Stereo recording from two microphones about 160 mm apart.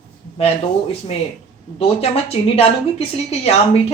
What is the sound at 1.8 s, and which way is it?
A woman's voice, 40° left (ahead or behind).